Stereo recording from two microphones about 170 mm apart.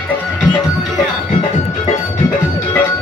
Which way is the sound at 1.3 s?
35° left (ahead or behind).